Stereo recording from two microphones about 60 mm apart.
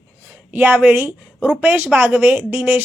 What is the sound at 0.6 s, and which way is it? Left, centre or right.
A woman's voice, right.